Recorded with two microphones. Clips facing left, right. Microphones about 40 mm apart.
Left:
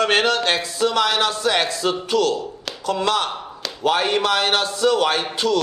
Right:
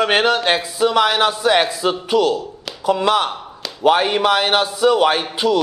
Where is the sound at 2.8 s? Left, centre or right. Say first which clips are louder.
Right 4 dB; centre.